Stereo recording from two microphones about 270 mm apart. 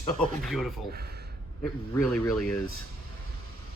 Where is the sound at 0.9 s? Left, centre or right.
Right.